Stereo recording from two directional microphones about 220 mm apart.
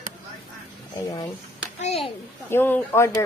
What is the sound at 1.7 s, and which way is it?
Speech, 30° left (ahead or behind).